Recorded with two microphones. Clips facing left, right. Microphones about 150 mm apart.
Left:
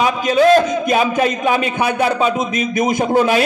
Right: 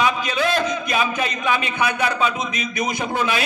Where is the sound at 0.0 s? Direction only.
40° left (ahead or behind).